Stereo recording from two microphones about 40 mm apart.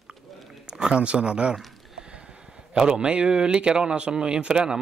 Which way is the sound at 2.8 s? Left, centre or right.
Right.